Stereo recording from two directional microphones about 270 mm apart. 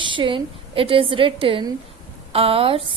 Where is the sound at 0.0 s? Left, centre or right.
Centre.